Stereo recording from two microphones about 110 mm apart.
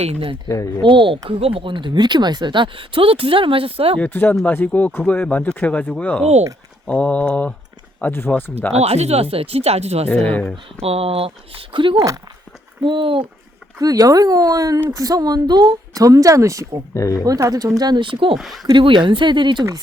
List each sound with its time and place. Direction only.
0.0 s speech: 65° right (ahead or behind)
0.4 s speech: 30° left (ahead or behind)
0.8 s speech: 50° right (ahead or behind)
4.0 s speech: 15° left (ahead or behind)
8.7 s speech: 80° right
10.1 s speech: 15° left (ahead or behind)
10.8 s speech: 65° right (ahead or behind)
11.7 s speech: 50° right (ahead or behind)
13.7 s a woman's voice: 35° right (ahead or behind)
16.9 s speech: 30° left (ahead or behind)
17.2 s a woman's voice: 35° right (ahead or behind); by 18.3 s 50° right (ahead or behind)
18.3 s speech: centre (ahead or behind)
18.6 s speech: 45° right (ahead or behind)